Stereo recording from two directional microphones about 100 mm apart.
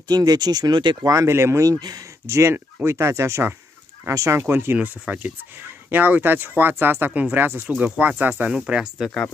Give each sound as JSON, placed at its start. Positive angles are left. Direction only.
{"t": 0.1, "sound": "speech", "side_deg": -40}
{"t": 1.1, "sound": "speech", "side_deg": -30}
{"t": 2.2, "sound": "speech", "side_deg": -25}